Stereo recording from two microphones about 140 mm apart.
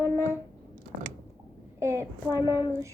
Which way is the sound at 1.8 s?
20° right (ahead or behind).